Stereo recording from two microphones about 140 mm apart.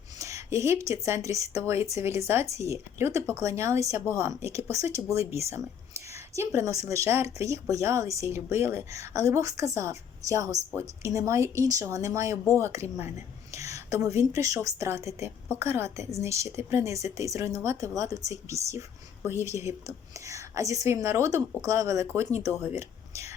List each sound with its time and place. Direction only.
0.2 s a woman's voice: 20° right (ahead or behind)